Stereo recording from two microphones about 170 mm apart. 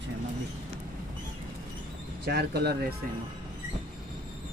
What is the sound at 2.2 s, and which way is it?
Speech, 70° right (ahead or behind).